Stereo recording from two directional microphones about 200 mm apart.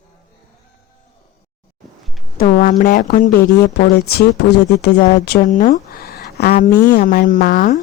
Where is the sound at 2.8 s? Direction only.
45° left (ahead or behind).